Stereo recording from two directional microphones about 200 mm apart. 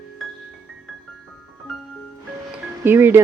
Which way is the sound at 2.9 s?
10° right (ahead or behind).